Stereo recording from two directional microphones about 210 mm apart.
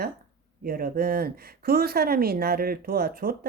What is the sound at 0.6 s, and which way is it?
Speech, 45° right (ahead or behind).